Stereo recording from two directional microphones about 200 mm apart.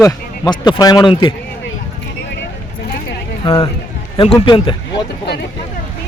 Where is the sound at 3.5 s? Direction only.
15° left (ahead or behind).